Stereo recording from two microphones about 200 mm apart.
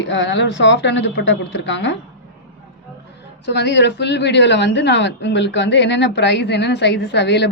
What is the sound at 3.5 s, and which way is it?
A woman's voice, 60° left (ahead or behind).